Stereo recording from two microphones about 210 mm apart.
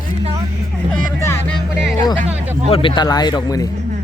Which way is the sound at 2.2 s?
30° right (ahead or behind).